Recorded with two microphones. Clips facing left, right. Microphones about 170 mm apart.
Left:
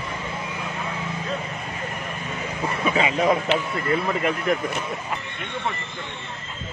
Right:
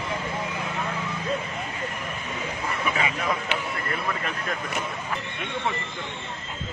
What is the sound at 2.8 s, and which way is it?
A man's voice, 30° left (ahead or behind).